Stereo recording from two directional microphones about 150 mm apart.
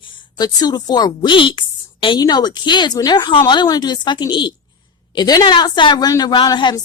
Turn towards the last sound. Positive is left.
turn(degrees=30)  # may be behind; listen again after turning